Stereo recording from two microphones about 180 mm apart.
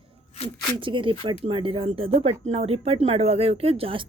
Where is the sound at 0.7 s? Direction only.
30° right (ahead or behind).